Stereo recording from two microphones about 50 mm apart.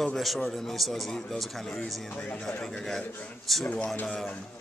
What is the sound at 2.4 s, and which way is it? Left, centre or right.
Speech, centre.